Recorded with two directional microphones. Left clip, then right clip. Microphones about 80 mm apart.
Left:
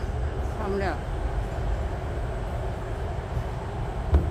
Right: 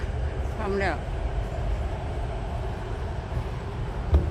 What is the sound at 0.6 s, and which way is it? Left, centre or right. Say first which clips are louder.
Speech: right 2 dB; right.